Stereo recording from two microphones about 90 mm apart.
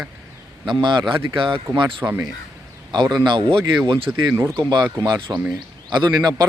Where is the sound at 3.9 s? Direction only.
85° right.